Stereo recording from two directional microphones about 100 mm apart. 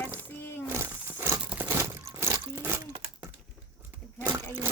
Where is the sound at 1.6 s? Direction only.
25° right (ahead or behind).